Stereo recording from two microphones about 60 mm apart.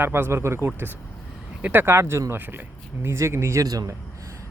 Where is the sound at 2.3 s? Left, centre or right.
Right.